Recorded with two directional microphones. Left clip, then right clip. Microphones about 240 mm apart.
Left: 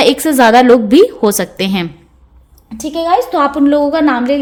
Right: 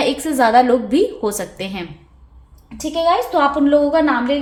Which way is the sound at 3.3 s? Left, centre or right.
Left.